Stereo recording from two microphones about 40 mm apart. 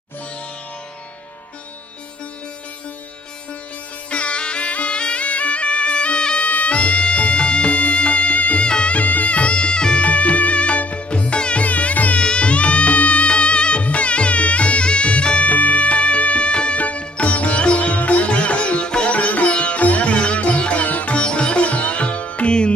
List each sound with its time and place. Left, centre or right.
4.1 s music: left
8.6 s music: left
9.0 s music: left
12.2 s music: left
15.4 s music: left
21.2 s sitar: left